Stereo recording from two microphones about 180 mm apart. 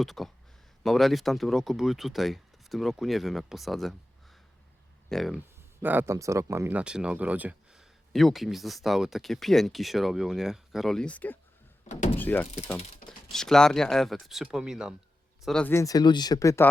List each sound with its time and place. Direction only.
0.0 s speech: centre (ahead or behind)
5.0 s speech: centre (ahead or behind)
5.8 s speech: 10° right (ahead or behind); by 11.3 s 10° left (ahead or behind)
11.9 s speech: 40° left (ahead or behind)
12.1 s speech: 10° left (ahead or behind)
15.4 s speech: 5° left (ahead or behind)